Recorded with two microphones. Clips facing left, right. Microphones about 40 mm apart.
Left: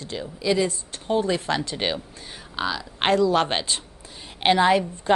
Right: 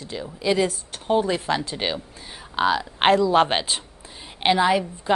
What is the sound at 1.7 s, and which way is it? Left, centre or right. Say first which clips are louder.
Speech: even; centre.